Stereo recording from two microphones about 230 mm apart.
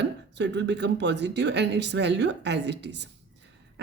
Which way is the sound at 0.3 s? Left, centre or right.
Right.